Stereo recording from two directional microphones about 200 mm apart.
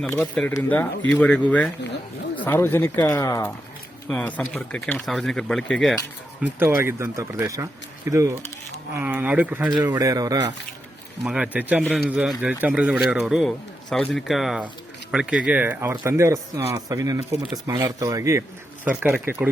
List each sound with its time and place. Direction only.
0.2 s speech: 5° left (ahead or behind)
6.4 s speech: 10° right (ahead or behind)
11.3 s speech: 5° right (ahead or behind)